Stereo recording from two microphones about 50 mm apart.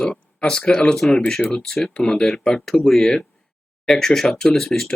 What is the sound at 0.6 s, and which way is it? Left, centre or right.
Speech, centre.